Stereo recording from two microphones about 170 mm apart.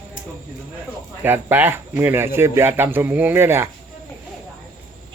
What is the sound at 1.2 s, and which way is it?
Speech, 10° right (ahead or behind).